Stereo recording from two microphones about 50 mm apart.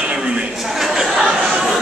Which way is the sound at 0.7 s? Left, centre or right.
Centre.